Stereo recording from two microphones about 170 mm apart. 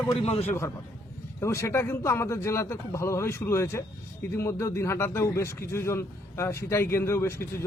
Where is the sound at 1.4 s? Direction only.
15° left (ahead or behind).